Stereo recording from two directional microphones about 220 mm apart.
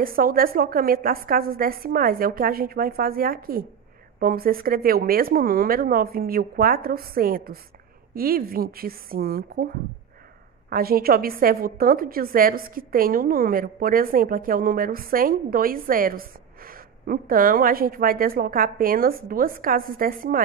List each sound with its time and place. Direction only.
0.0 s a woman's voice: 40° right (ahead or behind)
10.7 s a woman's voice: 45° right (ahead or behind)